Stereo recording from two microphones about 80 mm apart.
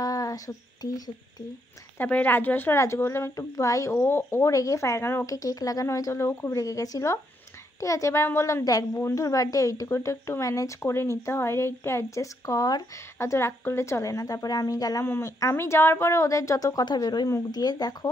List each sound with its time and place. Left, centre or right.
0.0 s humming: left
0.8 s a woman's voice: left
2.0 s speech: left
3.3 s speech: left
13.2 s a woman's voice: left
15.0 s speech: left
16.8 s speech: left